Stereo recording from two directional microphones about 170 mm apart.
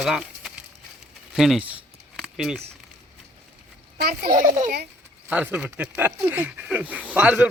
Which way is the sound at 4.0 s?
70° right (ahead or behind).